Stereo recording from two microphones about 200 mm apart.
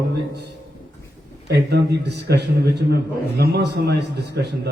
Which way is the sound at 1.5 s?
55° right (ahead or behind).